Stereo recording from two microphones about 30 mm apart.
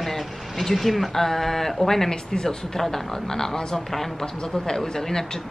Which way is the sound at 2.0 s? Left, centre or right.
Left.